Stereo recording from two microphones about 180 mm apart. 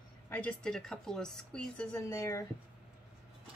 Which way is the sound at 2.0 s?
15° left (ahead or behind).